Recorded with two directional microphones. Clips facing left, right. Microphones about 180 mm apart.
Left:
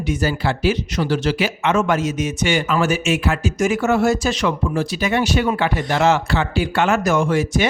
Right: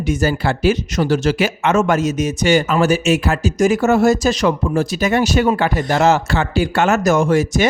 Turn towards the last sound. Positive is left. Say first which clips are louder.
# right 3 dB
turn(degrees=-40)  # may be behind; listen again after turning